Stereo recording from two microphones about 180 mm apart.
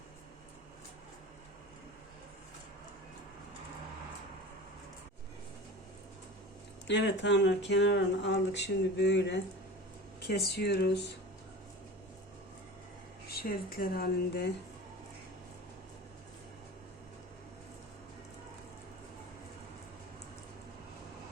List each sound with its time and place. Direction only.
6.8 s speech: 75° left (ahead or behind)
13.2 s speech: 60° left (ahead or behind)